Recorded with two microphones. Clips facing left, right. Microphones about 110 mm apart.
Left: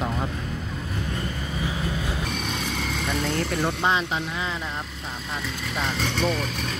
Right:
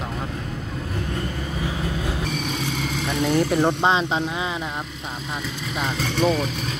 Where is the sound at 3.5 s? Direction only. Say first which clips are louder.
Right 5 dB; 25° right (ahead or behind).